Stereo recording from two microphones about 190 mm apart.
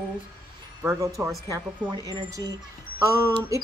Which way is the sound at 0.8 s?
15° right (ahead or behind).